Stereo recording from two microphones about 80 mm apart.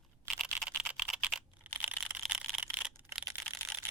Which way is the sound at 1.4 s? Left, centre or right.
Centre.